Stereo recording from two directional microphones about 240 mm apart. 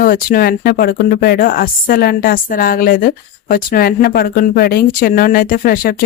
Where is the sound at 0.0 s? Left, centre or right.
Left.